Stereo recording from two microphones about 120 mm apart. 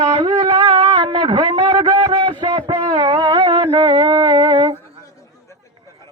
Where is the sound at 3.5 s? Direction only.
40° right (ahead or behind).